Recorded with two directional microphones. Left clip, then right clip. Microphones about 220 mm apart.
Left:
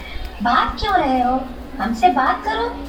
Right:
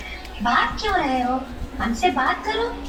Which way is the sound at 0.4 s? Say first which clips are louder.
Left 3 dB; 30° left (ahead or behind).